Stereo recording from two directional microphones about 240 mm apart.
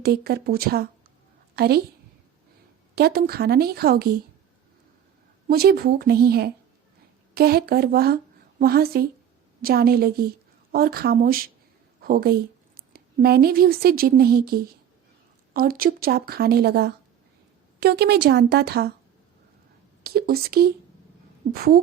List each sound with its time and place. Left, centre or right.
0.0 s speech: right
2.9 s speech: right
5.5 s a woman's voice: right
20.1 s speech: right